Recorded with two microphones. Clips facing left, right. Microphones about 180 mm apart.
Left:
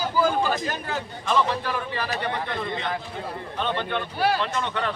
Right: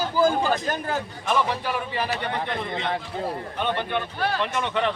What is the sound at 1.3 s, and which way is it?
A man's voice, 15° right (ahead or behind).